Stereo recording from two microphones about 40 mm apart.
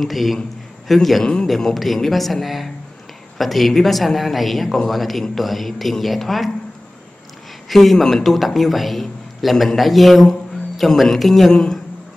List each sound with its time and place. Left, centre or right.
0.0 s a man's voice: centre
1.2 s a man's voice: left
1.5 s a man's voice: centre
7.7 s a man's voice: centre
11.5 s speech: left